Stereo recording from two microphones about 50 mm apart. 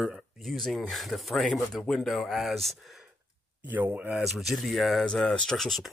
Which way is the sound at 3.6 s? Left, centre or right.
Right.